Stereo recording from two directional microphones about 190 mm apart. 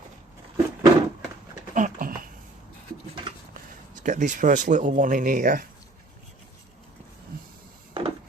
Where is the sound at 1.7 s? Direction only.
45° right (ahead or behind).